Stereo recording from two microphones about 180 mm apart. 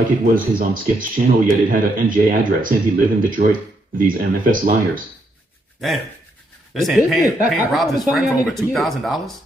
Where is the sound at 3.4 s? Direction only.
60° right (ahead or behind).